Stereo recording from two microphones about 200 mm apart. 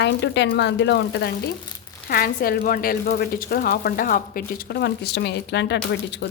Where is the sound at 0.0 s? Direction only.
60° left (ahead or behind).